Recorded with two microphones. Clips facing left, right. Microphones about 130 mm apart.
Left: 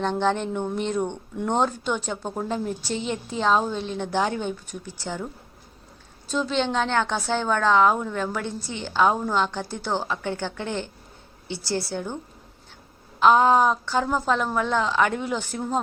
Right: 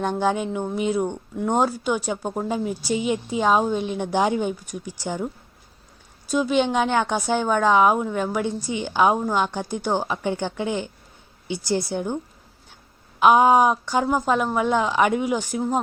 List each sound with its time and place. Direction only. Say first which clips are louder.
0.0 s speech: right 1 dB; 10° right (ahead or behind)